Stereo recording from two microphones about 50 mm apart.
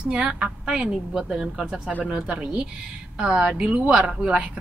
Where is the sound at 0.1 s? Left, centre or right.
Right.